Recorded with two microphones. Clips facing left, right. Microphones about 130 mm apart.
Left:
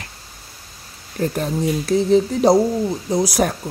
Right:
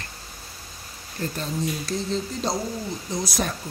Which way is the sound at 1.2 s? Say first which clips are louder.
Left 7 dB; 65° left (ahead or behind).